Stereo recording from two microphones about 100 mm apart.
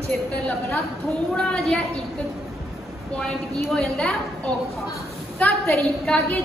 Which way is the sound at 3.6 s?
10° left (ahead or behind).